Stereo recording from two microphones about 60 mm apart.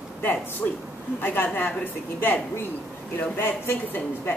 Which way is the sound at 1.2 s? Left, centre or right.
Left.